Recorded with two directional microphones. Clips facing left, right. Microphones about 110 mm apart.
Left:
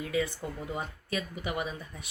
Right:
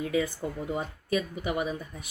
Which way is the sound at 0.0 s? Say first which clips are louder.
Right 3 dB; 30° right (ahead or behind).